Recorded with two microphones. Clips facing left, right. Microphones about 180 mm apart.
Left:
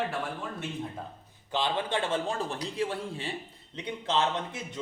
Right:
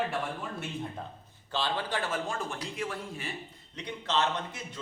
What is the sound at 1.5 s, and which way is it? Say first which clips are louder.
A man's voice: left 3 dB; 20° left (ahead or behind).